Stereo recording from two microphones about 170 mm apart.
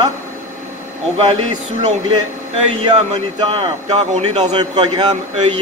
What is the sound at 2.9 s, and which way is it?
A man's voice, 30° right (ahead or behind).